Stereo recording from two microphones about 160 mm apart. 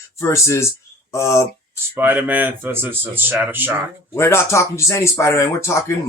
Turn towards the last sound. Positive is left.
turn(degrees=20)  # may be behind; listen again after turning